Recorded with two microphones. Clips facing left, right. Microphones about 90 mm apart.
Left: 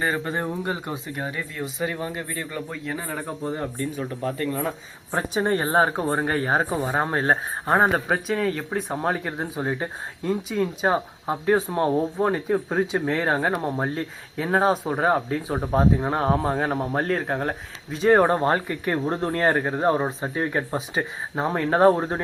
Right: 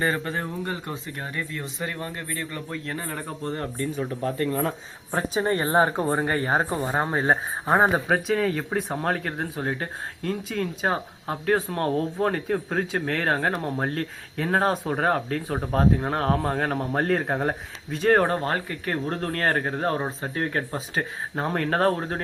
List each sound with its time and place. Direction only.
0.0 s speech: 15° left (ahead or behind)
5.4 s speech: 25° left (ahead or behind)
6.1 s speech: 65° left (ahead or behind)
6.7 s speech: 5° left (ahead or behind)
18.1 s speech: 20° left (ahead or behind)
21.8 s speech: 20° left (ahead or behind)